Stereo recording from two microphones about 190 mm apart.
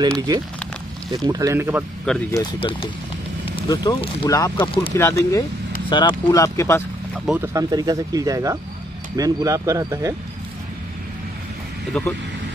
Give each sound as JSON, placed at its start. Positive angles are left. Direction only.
{"t": 1.1, "sound": "speech", "side_deg": -20}
{"t": 2.3, "sound": "speech", "side_deg": 25}
{"t": 4.9, "sound": "speech", "side_deg": 15}
{"t": 7.2, "sound": "speech", "side_deg": -10}
{"t": 11.9, "sound": "speech", "side_deg": 5}